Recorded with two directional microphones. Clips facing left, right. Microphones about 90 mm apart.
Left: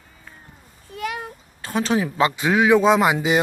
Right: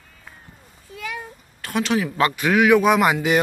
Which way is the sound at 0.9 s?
60° left (ahead or behind).